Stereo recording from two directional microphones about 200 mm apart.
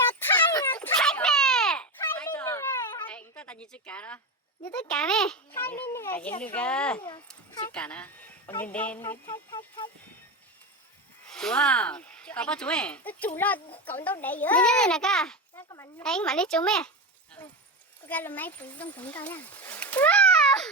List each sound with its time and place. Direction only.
0.2 s a sound: 10° left (ahead or behind)
4.8 s a child's voice: 5° left (ahead or behind)
9.5 s speech: 20° left (ahead or behind)
11.3 s a child's voice: 5° left (ahead or behind)
15.7 s a child's voice: 15° left (ahead or behind)
16.0 s a child's voice: 5° left (ahead or behind)